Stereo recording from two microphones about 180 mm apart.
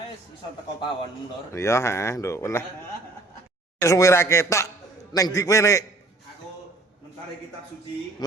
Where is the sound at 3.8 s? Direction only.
15° left (ahead or behind).